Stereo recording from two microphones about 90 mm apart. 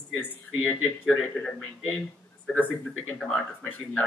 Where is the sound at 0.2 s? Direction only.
20° left (ahead or behind).